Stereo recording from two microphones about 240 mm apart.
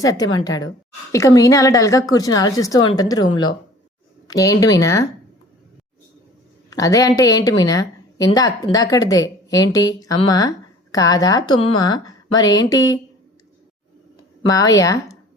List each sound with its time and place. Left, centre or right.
0.0 s a woman's voice: centre
6.7 s a woman's voice: centre
14.4 s a woman's voice: centre